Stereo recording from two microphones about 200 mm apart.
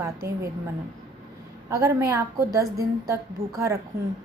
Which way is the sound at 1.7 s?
15° right (ahead or behind).